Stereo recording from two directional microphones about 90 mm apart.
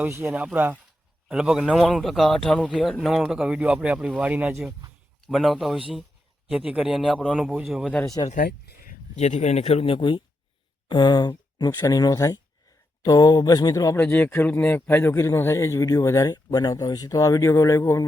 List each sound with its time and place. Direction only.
0.1 s speech: 20° right (ahead or behind)
1.3 s a man's voice: 10° right (ahead or behind)
2.6 s speech: 10° right (ahead or behind)
5.2 s a man's voice: centre (ahead or behind)
9.8 s speech: 75° left (ahead or behind)
10.8 s speech: 50° left (ahead or behind)
13.9 s a man's voice: 15° left (ahead or behind); by 18.0 s 35° left (ahead or behind)